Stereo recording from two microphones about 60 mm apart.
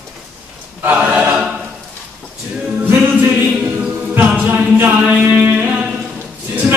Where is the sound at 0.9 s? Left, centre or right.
Right.